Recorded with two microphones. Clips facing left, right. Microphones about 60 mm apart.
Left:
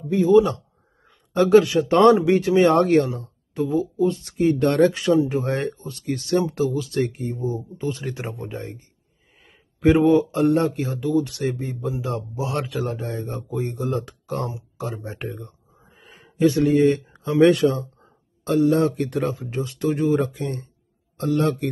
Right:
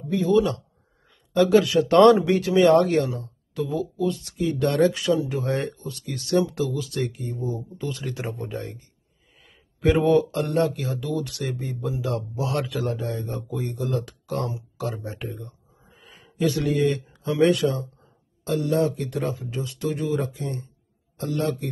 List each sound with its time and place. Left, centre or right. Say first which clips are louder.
1.0 s a sound: even; left
1.8 s speech: even; centre
2.2 s speech: left 1 dB; left
9.4 s a sound: left 4 dB; left
10.0 s speech: left 2 dB; centre
10.5 s speech: left 2 dB; left
15.1 s speech: left 2 dB; left
15.8 s a sound: left 2 dB; left
17.2 s speech: left 4 dB; left